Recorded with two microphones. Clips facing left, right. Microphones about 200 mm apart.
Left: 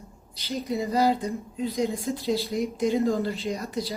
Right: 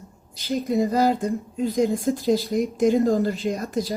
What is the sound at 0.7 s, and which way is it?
Speech, 50° right (ahead or behind).